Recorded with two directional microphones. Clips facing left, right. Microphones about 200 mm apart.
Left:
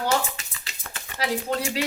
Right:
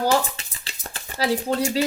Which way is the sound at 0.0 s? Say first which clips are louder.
Right 4 dB; 35° right (ahead or behind).